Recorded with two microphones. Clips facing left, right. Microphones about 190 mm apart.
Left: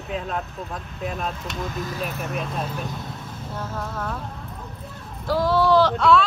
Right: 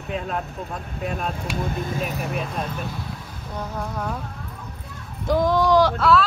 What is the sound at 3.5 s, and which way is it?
Speech, 15° right (ahead or behind).